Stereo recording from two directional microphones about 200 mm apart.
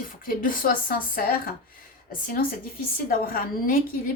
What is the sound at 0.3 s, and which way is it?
A woman's voice, 45° left (ahead or behind).